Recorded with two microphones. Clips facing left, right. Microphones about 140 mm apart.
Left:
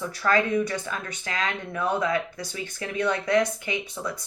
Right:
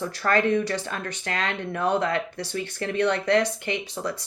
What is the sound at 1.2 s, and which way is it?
Speech, 60° right (ahead or behind).